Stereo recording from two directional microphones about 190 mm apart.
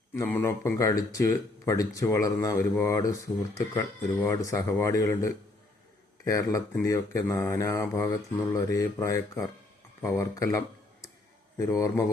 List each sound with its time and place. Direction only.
0.1 s speech: 10° left (ahead or behind)